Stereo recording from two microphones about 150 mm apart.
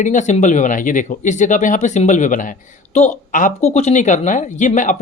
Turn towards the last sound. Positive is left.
turn(degrees=60)  # may be behind; listen again after turning